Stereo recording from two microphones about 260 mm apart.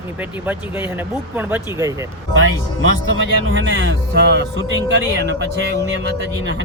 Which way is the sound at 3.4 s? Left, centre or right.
Right.